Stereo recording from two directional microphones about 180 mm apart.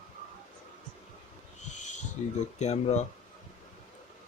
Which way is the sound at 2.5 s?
40° left (ahead or behind).